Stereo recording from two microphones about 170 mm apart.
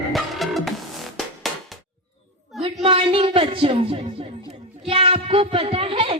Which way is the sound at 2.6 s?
35° right (ahead or behind).